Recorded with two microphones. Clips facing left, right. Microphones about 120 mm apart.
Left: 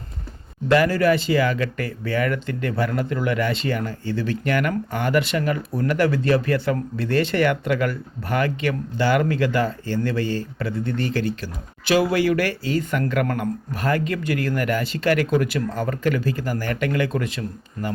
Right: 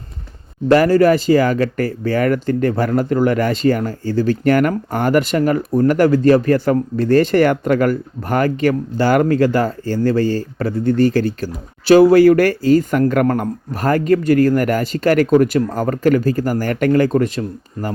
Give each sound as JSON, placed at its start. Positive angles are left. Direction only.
{"t": 0.7, "sound": "speech", "side_deg": -40}